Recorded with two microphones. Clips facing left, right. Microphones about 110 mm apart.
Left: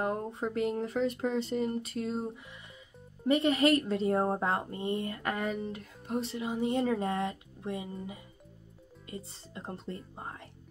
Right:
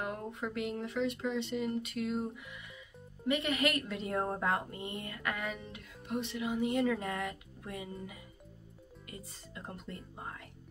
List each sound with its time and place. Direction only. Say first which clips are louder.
0.0 s speech: left 6 dB; 35° left (ahead or behind)
9.0 s speech: left 6 dB; 30° left (ahead or behind)